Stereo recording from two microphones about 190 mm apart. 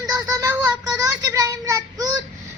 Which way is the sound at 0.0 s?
20° right (ahead or behind).